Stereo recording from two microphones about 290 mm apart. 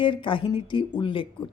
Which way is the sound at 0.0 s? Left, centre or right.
Centre.